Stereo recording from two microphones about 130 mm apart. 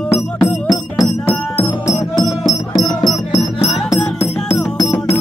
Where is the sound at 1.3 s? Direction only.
15° left (ahead or behind).